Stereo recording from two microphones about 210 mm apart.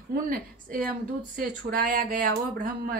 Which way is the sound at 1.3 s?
40° right (ahead or behind).